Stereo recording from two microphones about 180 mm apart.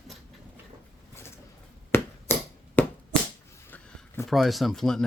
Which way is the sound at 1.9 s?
10° left (ahead or behind).